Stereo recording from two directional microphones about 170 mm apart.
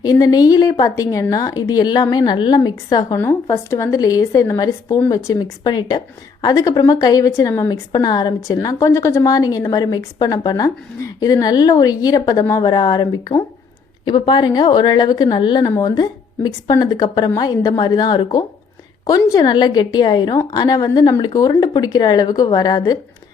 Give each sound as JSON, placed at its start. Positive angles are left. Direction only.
{"t": 0.0, "sound": "a woman's voice", "side_deg": 20}